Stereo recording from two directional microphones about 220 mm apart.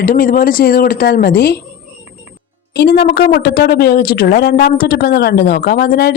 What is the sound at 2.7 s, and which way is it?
Speech, 45° left (ahead or behind).